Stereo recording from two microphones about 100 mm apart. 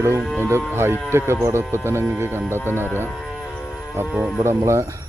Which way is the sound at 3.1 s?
Centre (ahead or behind).